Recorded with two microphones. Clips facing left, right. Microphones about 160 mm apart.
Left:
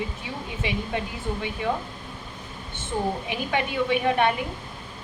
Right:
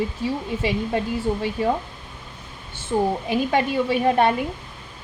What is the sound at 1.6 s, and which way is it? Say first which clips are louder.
Speech: right 5 dB; 40° right (ahead or behind).